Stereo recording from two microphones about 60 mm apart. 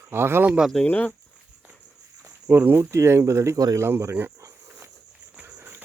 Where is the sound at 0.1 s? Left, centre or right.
Right.